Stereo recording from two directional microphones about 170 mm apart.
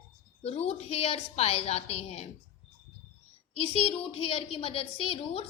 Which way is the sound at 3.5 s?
35° left (ahead or behind).